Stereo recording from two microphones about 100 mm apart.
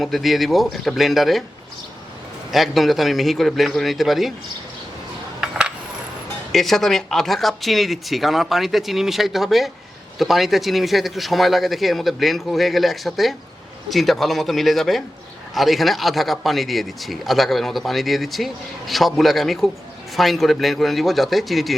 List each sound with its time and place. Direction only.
0.0 s speech: centre (ahead or behind)
2.5 s speech: centre (ahead or behind)
5.4 s coin: 10° right (ahead or behind)
6.5 s speech: centre (ahead or behind)